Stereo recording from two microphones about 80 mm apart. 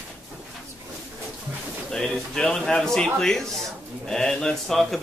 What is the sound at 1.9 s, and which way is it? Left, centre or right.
A man's voice, centre.